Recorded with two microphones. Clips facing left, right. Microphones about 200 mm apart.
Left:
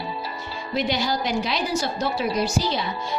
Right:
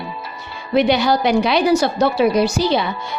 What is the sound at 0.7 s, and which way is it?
A woman's voice, 65° right (ahead or behind).